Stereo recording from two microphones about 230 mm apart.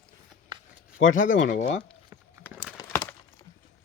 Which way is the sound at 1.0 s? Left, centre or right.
Left.